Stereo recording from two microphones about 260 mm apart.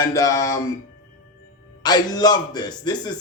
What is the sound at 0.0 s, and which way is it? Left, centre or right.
Speech, centre.